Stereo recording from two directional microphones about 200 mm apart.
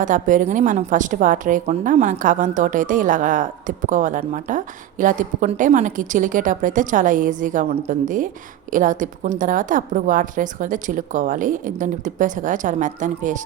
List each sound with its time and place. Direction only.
0.0 s a woman's voice: 40° right (ahead or behind)